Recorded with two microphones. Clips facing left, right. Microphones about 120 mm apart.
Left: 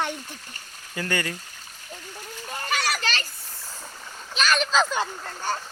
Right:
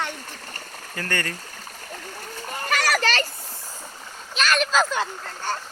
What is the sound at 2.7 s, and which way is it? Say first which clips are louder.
Children playing: right 5 dB; 45° right (ahead or behind).